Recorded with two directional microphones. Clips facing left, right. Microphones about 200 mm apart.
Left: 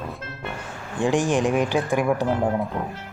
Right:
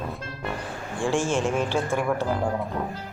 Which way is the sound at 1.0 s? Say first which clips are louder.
Left 4 dB; 15° left (ahead or behind).